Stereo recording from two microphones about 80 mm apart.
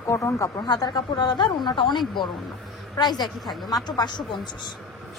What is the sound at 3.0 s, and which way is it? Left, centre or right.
Speech, left.